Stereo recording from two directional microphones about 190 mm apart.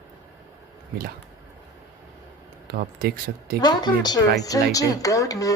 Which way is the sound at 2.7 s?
55° right (ahead or behind).